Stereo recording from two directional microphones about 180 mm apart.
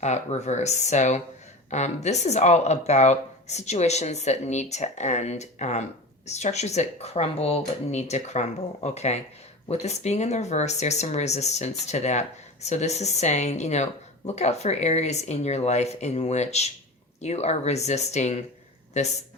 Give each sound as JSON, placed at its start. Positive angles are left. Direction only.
{"t": 0.0, "sound": "speech", "side_deg": 40}